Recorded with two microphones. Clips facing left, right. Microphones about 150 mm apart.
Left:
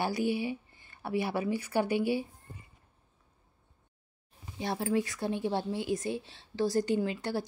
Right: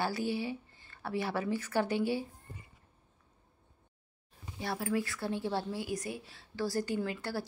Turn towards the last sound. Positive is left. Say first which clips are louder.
# left 4 dB
turn(degrees=20)  # may be behind; listen again after turning